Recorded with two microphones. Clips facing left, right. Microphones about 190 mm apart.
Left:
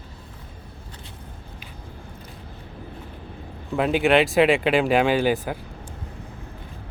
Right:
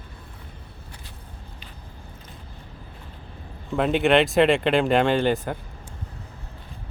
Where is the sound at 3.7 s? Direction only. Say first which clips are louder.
Even; centre (ahead or behind).